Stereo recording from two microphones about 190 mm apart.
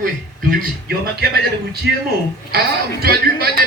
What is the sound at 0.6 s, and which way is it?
Speech, 55° right (ahead or behind).